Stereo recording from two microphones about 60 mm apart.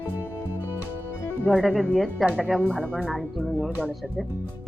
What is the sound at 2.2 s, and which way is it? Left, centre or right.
Speech, right.